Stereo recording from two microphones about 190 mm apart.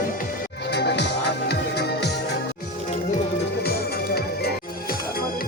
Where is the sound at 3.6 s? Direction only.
55° left (ahead or behind).